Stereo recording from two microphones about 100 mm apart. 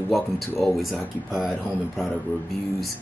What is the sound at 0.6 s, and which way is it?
Speech, centre (ahead or behind).